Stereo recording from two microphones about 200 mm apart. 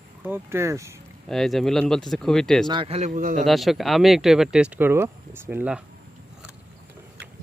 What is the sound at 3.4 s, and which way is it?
Speech, centre (ahead or behind).